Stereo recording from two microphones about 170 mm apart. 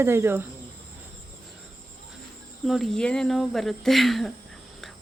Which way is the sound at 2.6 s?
Centre (ahead or behind).